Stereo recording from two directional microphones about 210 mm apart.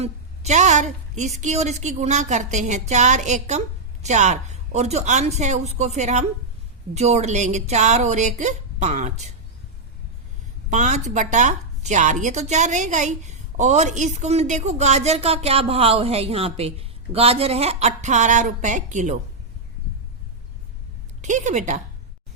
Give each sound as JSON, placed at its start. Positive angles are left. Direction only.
{"t": 0.0, "sound": "speech", "side_deg": -35}
{"t": 10.7, "sound": "speech", "side_deg": -35}
{"t": 21.2, "sound": "a woman's voice", "side_deg": -35}